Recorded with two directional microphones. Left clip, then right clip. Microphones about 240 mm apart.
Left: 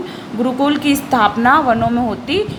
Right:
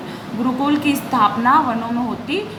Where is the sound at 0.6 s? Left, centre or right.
Left.